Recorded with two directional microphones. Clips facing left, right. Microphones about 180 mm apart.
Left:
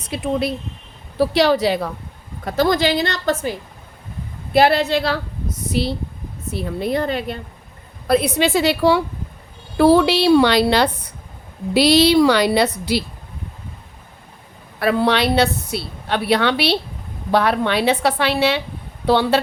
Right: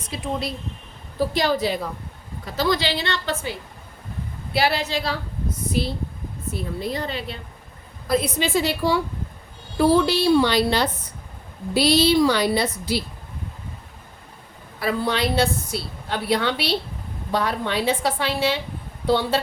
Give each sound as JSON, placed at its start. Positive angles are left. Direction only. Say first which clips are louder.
{"t": 0.1, "sound": "a woman's voice", "louder": "left 6 dB", "side_deg": 60}
{"t": 1.2, "sound": "a woman's voice", "louder": "left 6 dB", "side_deg": 75}
{"t": 2.4, "sound": "a woman's voice", "louder": "left 5 dB", "side_deg": 55}
{"t": 4.5, "sound": "a woman's voice", "louder": "left 8 dB", "side_deg": 55}
{"t": 8.0, "sound": "a woman's voice", "louder": "left 5 dB", "side_deg": 65}
{"t": 14.8, "sound": "a woman's voice", "louder": "left 6 dB", "side_deg": 65}